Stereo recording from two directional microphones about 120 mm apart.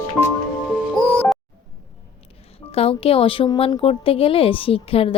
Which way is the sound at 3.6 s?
55° left (ahead or behind).